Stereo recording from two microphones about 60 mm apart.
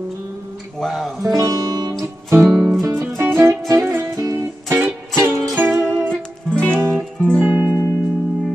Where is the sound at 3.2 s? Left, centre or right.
Right.